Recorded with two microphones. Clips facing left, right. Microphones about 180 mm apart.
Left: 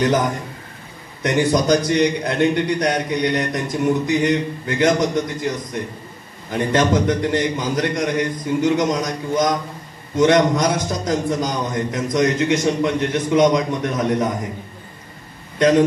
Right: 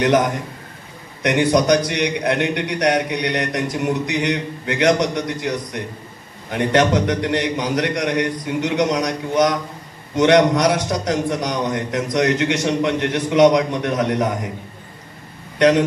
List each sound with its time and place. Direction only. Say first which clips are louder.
1.2 s a man's voice: right 1 dB; 75° right (ahead or behind)